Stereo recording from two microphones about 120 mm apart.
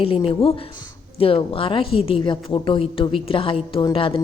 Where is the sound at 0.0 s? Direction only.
50° left (ahead or behind).